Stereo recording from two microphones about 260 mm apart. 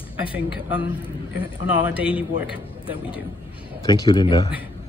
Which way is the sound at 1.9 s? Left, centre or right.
Left.